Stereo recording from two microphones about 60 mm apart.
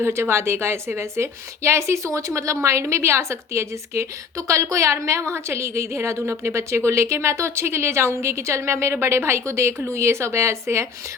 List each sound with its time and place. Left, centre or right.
0.0 s a woman's voice: right